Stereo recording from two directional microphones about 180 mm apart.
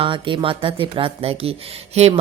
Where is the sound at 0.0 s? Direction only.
25° right (ahead or behind).